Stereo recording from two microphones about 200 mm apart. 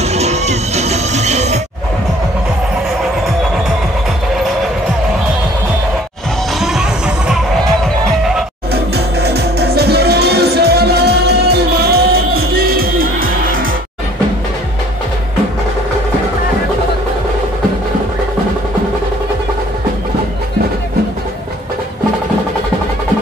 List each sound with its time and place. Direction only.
0.0 s music: 35° right (ahead or behind)
6.6 s music: centre (ahead or behind)
8.9 s music: 55° right (ahead or behind)